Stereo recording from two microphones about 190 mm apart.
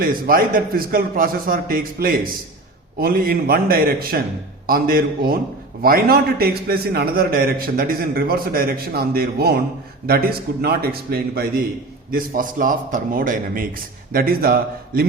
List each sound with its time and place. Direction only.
0.0 s a man's voice: 50° right (ahead or behind)